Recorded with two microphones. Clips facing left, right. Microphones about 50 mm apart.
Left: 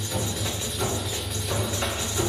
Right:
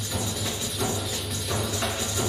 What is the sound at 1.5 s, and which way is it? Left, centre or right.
Music, centre.